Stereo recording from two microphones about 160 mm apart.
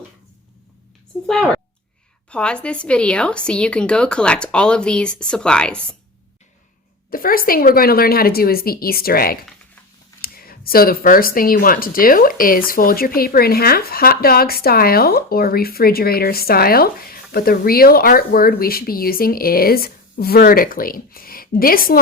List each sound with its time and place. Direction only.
1.3 s a woman's voice: 5° left (ahead or behind)
7.1 s speech: 65° left (ahead or behind)